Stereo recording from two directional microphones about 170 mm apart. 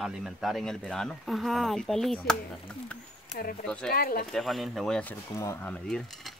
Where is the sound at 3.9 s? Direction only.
60° left (ahead or behind).